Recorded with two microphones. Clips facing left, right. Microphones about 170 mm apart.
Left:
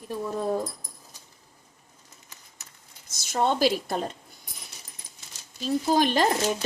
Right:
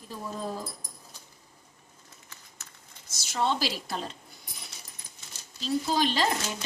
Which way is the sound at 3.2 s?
50° left (ahead or behind).